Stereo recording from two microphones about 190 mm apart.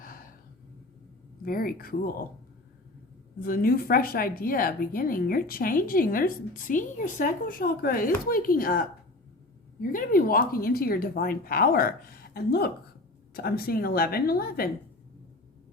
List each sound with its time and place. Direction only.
1.5 s a woman's voice: 50° left (ahead or behind)
3.4 s a woman's voice: 50° left (ahead or behind)